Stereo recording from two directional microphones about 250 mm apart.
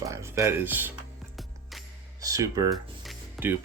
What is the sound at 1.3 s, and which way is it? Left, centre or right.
Music, centre.